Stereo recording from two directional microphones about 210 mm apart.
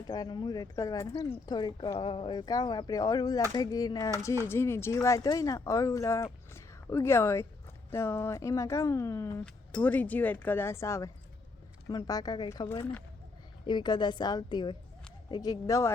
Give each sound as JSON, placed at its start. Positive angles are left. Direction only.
{"t": 0.1, "sound": "a woman's voice", "side_deg": 20}